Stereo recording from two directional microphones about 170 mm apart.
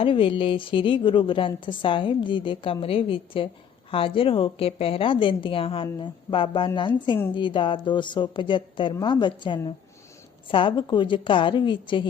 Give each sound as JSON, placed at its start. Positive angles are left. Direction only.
{"t": 0.0, "sound": "a woman's voice", "side_deg": 30}